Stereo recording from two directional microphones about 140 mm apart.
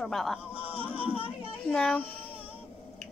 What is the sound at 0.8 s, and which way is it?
Speech, 10° right (ahead or behind).